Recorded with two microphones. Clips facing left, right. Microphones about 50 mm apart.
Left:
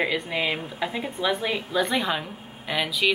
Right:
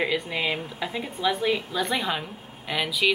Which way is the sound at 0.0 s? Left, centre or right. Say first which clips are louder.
Left 1 dB; centre.